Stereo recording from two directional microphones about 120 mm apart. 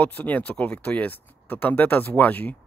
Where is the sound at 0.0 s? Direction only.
10° left (ahead or behind).